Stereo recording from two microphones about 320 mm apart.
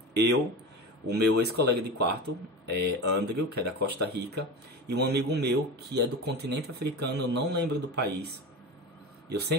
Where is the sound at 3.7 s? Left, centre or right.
Right.